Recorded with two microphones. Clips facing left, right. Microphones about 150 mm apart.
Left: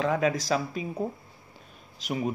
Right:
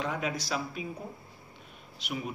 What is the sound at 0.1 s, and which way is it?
Speech, 90° left.